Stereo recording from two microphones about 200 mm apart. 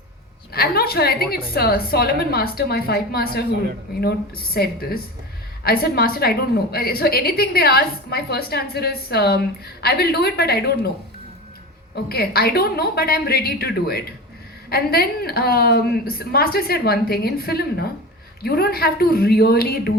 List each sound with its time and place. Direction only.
0.5 s a woman's voice: 50° left (ahead or behind)
12.0 s a woman's voice: 50° left (ahead or behind)